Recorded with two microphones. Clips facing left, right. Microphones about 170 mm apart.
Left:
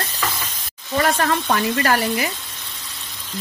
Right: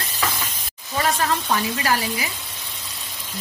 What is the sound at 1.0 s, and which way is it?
Speech, 60° left (ahead or behind).